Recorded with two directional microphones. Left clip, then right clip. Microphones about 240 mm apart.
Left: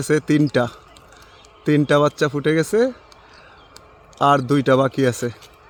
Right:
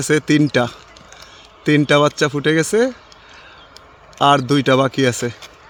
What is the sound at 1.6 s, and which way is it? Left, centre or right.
Speech, centre.